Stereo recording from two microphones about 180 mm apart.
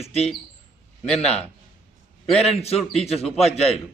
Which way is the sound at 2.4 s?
35° left (ahead or behind).